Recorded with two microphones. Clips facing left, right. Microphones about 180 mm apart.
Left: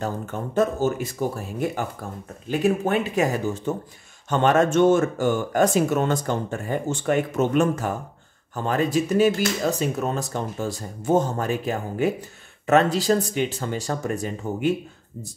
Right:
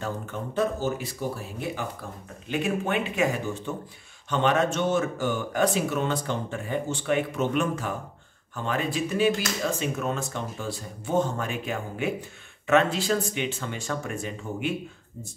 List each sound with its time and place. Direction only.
0.0 s speech: 45° left (ahead or behind)